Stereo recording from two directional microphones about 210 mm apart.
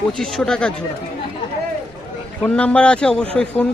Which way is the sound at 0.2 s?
5° left (ahead or behind).